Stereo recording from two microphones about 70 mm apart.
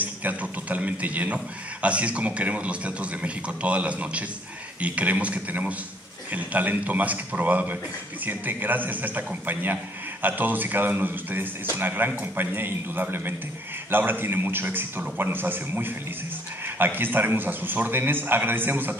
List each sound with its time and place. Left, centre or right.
0.0 s a man's voice: right